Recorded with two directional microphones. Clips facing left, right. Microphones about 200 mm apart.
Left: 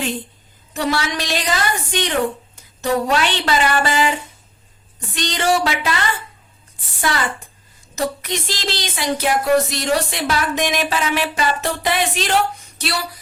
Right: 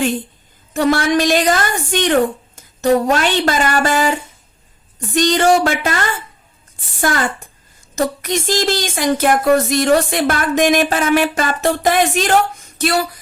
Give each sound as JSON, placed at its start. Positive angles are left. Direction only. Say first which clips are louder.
{"t": 0.7, "sound": "speech", "louder": "right 7 dB", "side_deg": -50}
{"t": 5.1, "sound": "speech", "louder": "right 6 dB", "side_deg": -45}